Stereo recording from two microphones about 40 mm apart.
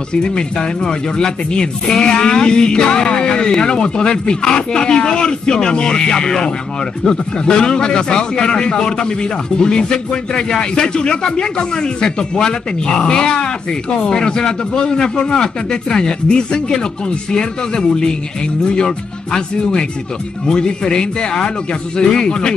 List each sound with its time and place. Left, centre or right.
0.1 s speech: left